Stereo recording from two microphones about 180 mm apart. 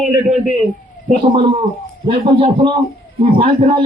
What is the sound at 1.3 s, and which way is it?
A man's voice, 30° right (ahead or behind).